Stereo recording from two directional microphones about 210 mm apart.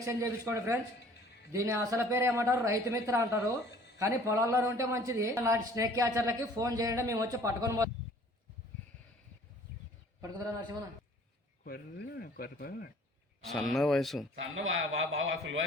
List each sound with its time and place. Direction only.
0.0 s speech: 15° right (ahead or behind)
10.2 s a sound: 15° right (ahead or behind)
11.6 s speech: 45° left (ahead or behind)
13.4 s speech: centre (ahead or behind)
14.3 s a man's voice: 65° right (ahead or behind)